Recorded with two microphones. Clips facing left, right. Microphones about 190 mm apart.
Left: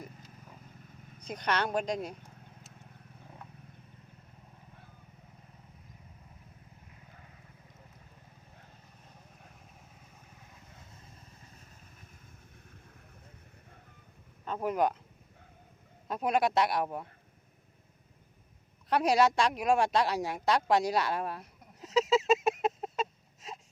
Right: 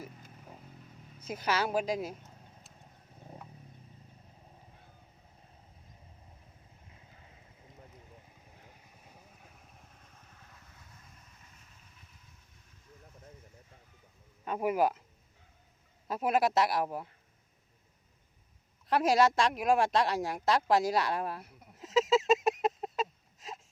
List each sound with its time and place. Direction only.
0.2 s vehicle: 40° right (ahead or behind)
1.2 s speech: 5° right (ahead or behind)
10.0 s vehicle: 15° left (ahead or behind)
11.5 s vehicle: 40° left (ahead or behind)
14.4 s a sound: 10° right (ahead or behind)
16.0 s speech: 5° right (ahead or behind)
18.9 s a sound: centre (ahead or behind)